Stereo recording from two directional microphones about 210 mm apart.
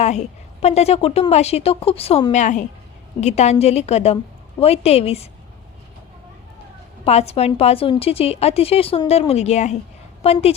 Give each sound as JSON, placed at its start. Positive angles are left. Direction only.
{"t": 0.0, "sound": "a woman's voice", "side_deg": 30}
{"t": 7.0, "sound": "a woman's voice", "side_deg": 30}